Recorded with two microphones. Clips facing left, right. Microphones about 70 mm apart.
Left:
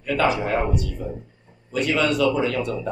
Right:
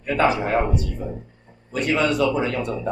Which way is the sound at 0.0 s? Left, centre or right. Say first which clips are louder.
Right 1 dB; right.